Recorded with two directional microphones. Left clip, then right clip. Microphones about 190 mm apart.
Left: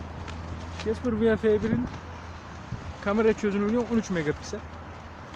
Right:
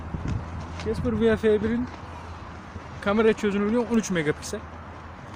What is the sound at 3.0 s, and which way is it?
Speech, 10° right (ahead or behind).